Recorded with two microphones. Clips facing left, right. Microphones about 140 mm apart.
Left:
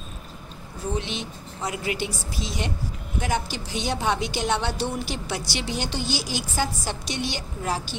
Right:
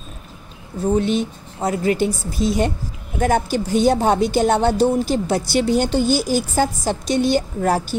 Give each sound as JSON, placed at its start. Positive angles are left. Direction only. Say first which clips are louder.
{"t": 0.9, "sound": "speech", "louder": "right 14 dB", "side_deg": -45}